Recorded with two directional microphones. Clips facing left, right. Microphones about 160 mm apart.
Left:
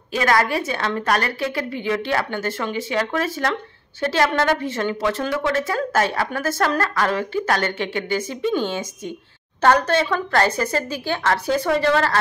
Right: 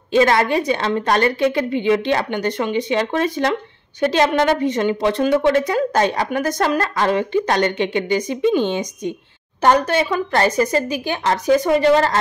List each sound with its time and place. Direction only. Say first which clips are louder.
0.1 s a woman's voice: right 5 dB; 25° right (ahead or behind)